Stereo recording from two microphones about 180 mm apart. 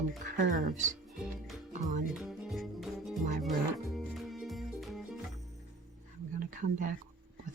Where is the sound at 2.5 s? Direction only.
Centre (ahead or behind).